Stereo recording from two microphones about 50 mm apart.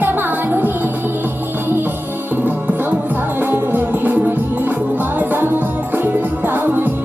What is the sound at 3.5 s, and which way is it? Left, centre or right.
Music, right.